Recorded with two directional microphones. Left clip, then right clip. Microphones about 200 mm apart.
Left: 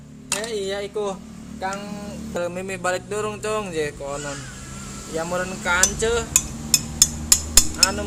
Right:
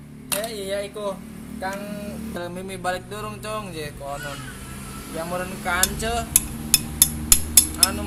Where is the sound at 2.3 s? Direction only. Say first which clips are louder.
Left 8 dB; 50° left (ahead or behind).